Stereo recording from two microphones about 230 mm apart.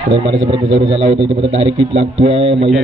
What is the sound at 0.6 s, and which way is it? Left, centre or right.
Speech, right.